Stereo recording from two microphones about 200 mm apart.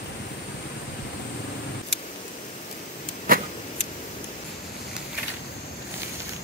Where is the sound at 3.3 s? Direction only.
45° right (ahead or behind).